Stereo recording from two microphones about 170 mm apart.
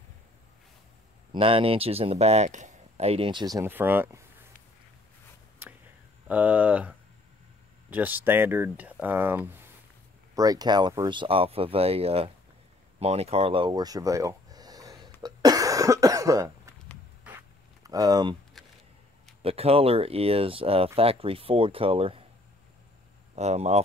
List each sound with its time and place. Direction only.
1.3 s speech: 35° right (ahead or behind); by 4.3 s 15° right (ahead or behind)
5.6 s whispering: 10° right (ahead or behind)
6.2 s speech: 10° right (ahead or behind); by 12.3 s 35° right (ahead or behind)
13.0 s a sound: 35° right (ahead or behind); by 16.7 s 20° right (ahead or behind)
17.3 s a sound: 5° right (ahead or behind)
17.8 s speech: 20° right (ahead or behind)
19.4 s speech: 35° right (ahead or behind)
23.3 s speech: 40° right (ahead or behind)